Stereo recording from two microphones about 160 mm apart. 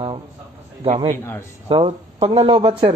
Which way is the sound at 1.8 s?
40° right (ahead or behind).